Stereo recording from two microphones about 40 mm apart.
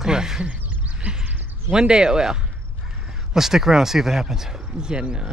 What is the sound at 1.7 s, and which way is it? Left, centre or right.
Speech, right.